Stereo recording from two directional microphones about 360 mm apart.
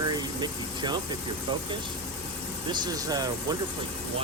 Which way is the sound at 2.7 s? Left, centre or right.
Centre.